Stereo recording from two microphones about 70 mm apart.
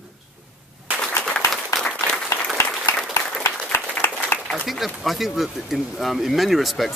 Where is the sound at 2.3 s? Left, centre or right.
Left.